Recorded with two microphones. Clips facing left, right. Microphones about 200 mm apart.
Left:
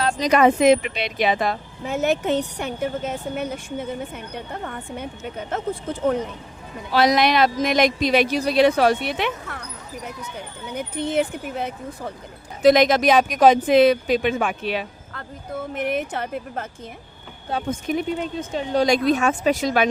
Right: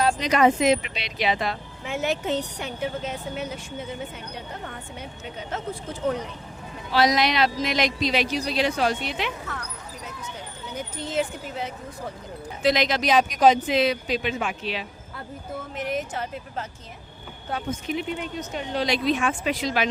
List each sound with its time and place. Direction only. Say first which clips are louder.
0.2 s speech: left 4 dB; 55° left (ahead or behind)
10.8 s speech: left 5 dB; 60° left (ahead or behind)
17.7 s speech: left 5 dB; 45° left (ahead or behind)
18.3 s a woman's voice: left 5 dB; 30° left (ahead or behind)
19.0 s speech: left 5 dB; 40° left (ahead or behind)